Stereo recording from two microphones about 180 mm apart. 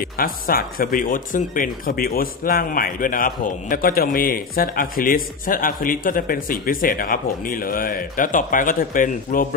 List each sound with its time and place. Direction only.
0.0 s speech: 55° left (ahead or behind)